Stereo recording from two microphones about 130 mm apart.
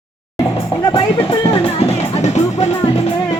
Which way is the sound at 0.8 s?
35° left (ahead or behind).